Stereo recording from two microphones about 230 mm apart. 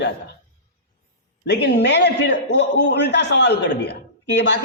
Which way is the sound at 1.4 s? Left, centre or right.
Left.